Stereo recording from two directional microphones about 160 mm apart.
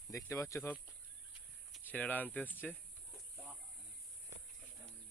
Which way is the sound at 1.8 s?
10° left (ahead or behind).